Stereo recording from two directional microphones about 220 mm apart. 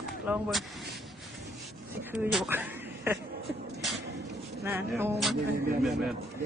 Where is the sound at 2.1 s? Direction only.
5° right (ahead or behind).